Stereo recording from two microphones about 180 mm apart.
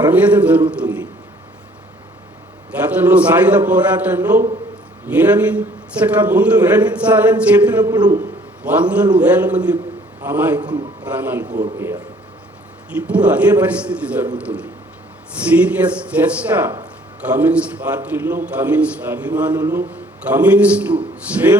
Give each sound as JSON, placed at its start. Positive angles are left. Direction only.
{"t": 0.0, "sound": "a man's voice", "side_deg": -10}
{"t": 2.9, "sound": "a man's voice", "side_deg": -10}
{"t": 7.8, "sound": "a man's voice", "side_deg": -20}
{"t": 8.6, "sound": "a man's voice", "side_deg": -10}
{"t": 10.6, "sound": "a man's voice", "side_deg": -25}
{"t": 11.0, "sound": "a man's voice", "side_deg": -10}
{"t": 11.4, "sound": "a man's voice", "side_deg": -45}
{"t": 12.9, "sound": "a man's voice", "side_deg": -5}